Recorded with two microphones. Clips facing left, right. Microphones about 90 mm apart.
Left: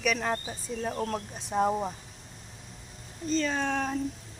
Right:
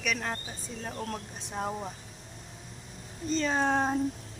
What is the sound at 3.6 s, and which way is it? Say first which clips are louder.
Speech: right 3 dB; 35° right (ahead or behind).